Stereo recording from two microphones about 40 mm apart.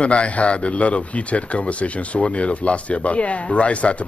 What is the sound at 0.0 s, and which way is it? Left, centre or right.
A man's voice, left.